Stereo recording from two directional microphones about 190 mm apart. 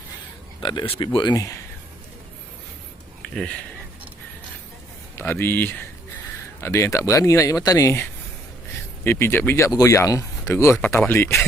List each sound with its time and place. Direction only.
0.6 s speech: 25° left (ahead or behind)
5.1 s speech: 10° left (ahead or behind)